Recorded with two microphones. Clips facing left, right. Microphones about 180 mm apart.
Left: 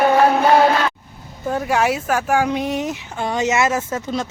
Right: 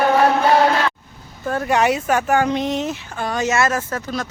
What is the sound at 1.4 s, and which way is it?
Speech, 10° left (ahead or behind).